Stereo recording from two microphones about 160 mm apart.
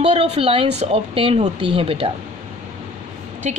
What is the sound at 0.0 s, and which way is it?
A woman's voice, 40° right (ahead or behind).